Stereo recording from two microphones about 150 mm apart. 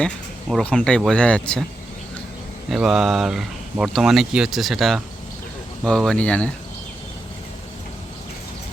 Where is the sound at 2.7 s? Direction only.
5° right (ahead or behind).